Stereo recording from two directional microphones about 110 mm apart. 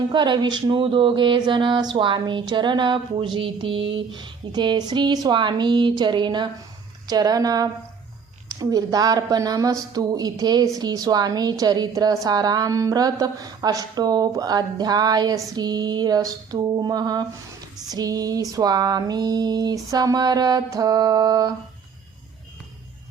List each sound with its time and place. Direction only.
0.1 s speech: 45° right (ahead or behind)
7.1 s mantra: 35° right (ahead or behind)